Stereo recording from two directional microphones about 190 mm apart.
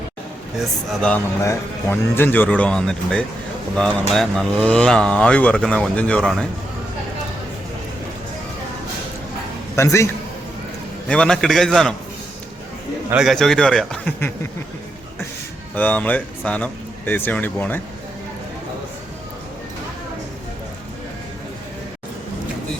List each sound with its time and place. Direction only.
0.6 s speech: centre (ahead or behind)
1.4 s speech: 15° left (ahead or behind)
9.7 s speech: 15° left (ahead or behind)
11.1 s speech: 5° left (ahead or behind)
13.1 s speech: centre (ahead or behind)
15.7 s speech: 10° left (ahead or behind)